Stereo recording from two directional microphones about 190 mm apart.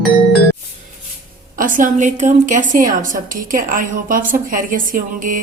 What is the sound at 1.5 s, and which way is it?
A woman's voice, 45° right (ahead or behind).